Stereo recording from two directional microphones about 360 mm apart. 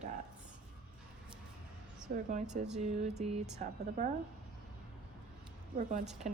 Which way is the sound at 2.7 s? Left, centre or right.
Centre.